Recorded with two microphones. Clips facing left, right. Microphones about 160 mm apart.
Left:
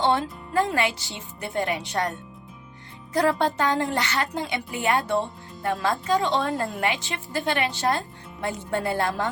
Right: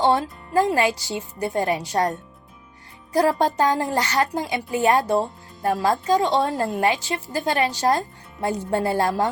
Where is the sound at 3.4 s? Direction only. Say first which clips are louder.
Right 3 dB; 35° right (ahead or behind).